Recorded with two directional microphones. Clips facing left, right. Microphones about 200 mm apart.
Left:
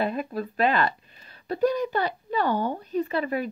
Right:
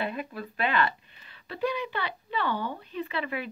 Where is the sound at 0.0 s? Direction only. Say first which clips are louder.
Left 6 dB; 40° left (ahead or behind).